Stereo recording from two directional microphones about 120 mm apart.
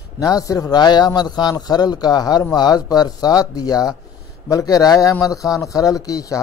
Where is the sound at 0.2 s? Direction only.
30° left (ahead or behind).